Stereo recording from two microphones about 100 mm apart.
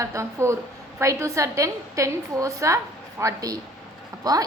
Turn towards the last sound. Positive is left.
turn(degrees=-40)  # may be behind; listen again after turning